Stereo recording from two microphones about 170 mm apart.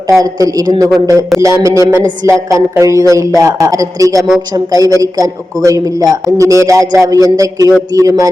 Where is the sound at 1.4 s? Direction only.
15° right (ahead or behind).